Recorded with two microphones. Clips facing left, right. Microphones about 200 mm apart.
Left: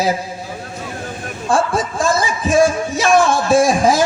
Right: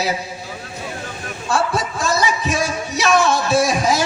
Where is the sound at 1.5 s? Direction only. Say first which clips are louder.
Left 3 dB; 50° left (ahead or behind).